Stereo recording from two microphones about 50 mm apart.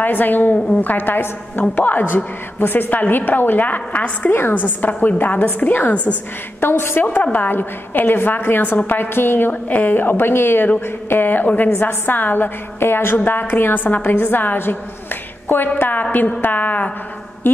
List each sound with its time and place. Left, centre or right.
0.0 s a woman's voice: left
4.3 s a woman's voice: left
4.6 s a woman's voice: left
9.5 s a woman's voice: left